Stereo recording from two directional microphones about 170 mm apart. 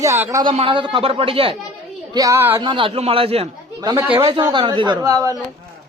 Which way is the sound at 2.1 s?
20° right (ahead or behind).